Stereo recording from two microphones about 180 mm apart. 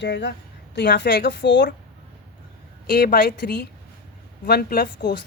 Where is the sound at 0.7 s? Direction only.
70° left (ahead or behind).